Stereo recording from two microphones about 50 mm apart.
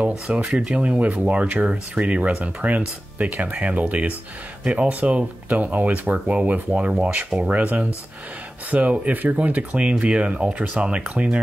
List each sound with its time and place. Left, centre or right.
0.3 s speech: right
6.7 s speech: right